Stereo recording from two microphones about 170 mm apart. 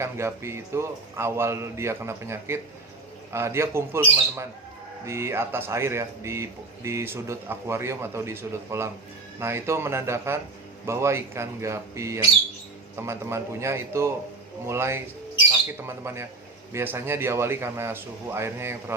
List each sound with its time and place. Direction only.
0.0 s speech: 15° right (ahead or behind)